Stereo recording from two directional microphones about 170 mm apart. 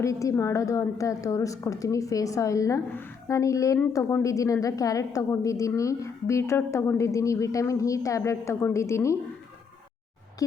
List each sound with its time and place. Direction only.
0.0 s a woman's voice: 20° left (ahead or behind)